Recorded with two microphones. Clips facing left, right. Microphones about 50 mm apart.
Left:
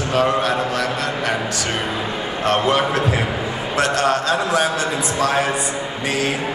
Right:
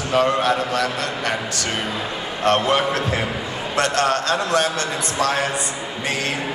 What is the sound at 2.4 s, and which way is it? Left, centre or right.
A man's voice, centre.